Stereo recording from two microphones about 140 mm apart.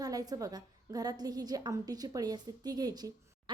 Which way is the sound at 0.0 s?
25° right (ahead or behind).